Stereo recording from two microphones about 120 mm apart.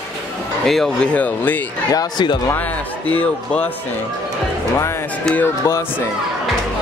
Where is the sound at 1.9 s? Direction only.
40° left (ahead or behind).